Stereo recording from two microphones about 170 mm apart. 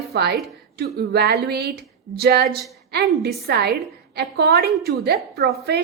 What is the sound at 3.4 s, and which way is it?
A woman's voice, 70° right (ahead or behind).